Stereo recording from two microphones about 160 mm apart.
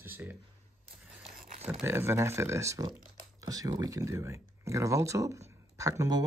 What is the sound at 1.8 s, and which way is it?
Speech, 15° right (ahead or behind).